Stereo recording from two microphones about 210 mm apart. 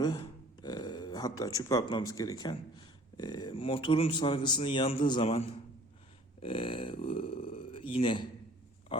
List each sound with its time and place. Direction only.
0.6 s a man's voice: 20° left (ahead or behind)